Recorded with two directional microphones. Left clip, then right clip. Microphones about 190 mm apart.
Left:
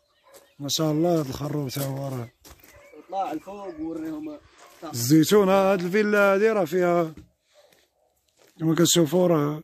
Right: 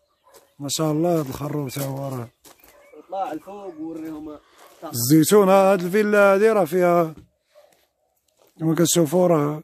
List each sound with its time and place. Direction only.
0.6 s speech: 15° right (ahead or behind)
3.0 s speech: 5° right (ahead or behind)
4.9 s music: 20° right (ahead or behind)
8.5 s speech: 15° right (ahead or behind)